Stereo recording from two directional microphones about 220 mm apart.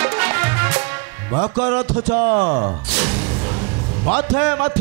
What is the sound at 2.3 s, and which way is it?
A man's voice, 25° right (ahead or behind).